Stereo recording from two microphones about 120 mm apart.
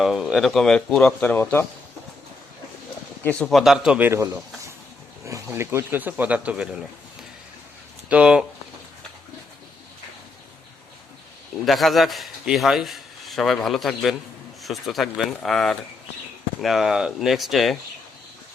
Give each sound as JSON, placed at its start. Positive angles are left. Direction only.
{"t": 0.0, "sound": "a man's voice", "side_deg": -5}
{"t": 3.2, "sound": "a man's voice", "side_deg": 10}
{"t": 3.5, "sound": "a man's voice", "side_deg": 0}
{"t": 11.6, "sound": "a man's voice", "side_deg": 0}